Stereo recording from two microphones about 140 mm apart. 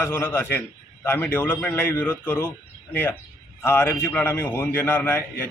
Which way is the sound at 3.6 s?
15° left (ahead or behind).